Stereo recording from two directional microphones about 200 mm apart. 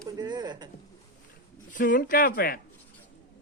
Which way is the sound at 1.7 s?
40° left (ahead or behind).